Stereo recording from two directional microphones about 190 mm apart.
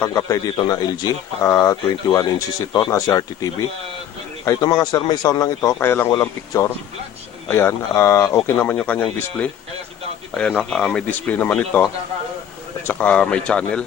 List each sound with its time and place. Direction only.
0.0 s speech: 15° left (ahead or behind)
12.9 s speech: 5° left (ahead or behind)